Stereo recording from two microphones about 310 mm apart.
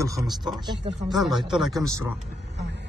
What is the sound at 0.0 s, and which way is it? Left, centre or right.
Speech, centre.